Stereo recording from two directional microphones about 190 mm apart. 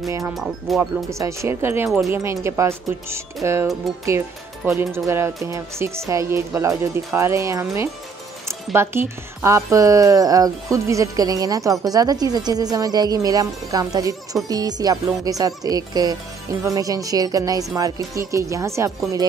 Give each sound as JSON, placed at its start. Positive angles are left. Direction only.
{"t": 0.0, "sound": "a woman's voice", "side_deg": -15}